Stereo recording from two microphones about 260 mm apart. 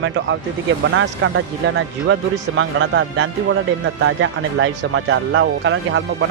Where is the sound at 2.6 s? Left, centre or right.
Right.